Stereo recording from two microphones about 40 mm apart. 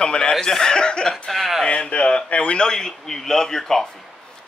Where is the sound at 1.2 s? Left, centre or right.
Centre.